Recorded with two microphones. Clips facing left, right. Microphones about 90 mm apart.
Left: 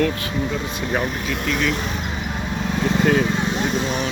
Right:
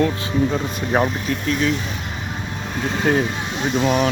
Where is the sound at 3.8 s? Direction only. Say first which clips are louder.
Right 6 dB; 45° right (ahead or behind).